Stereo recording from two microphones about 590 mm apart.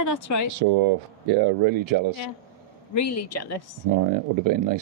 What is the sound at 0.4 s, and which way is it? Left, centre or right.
Speech, right.